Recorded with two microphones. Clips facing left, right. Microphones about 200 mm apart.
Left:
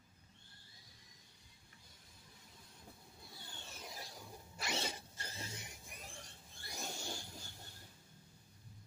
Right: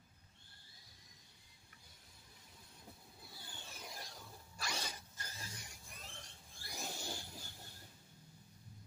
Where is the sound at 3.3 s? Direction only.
5° right (ahead or behind).